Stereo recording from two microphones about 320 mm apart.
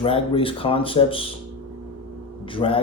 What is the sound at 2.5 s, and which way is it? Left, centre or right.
Speech, centre.